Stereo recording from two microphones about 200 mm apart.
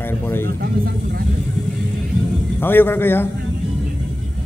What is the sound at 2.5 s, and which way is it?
Speech, 10° left (ahead or behind).